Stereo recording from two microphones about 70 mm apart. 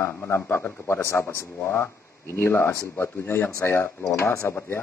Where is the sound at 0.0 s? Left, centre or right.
Left.